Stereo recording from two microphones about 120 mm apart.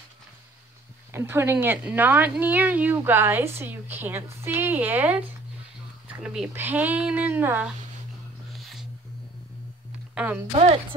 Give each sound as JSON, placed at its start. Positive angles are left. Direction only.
{"t": 1.1, "sound": "a woman's voice", "side_deg": -20}
{"t": 10.1, "sound": "speech", "side_deg": -10}
{"t": 10.5, "sound": "speech", "side_deg": -55}